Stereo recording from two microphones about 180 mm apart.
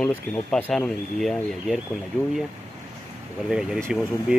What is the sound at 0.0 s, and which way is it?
Speech, 5° left (ahead or behind).